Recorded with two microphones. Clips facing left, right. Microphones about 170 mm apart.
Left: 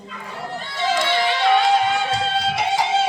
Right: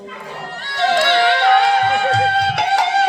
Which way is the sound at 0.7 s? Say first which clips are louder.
Right 6 dB; 70° right (ahead or behind).